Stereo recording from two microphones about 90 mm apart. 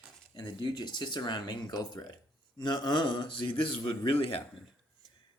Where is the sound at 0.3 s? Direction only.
50° left (ahead or behind); by 4.4 s 80° left.